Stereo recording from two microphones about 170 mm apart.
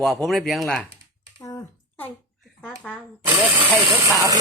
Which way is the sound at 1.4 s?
20° left (ahead or behind).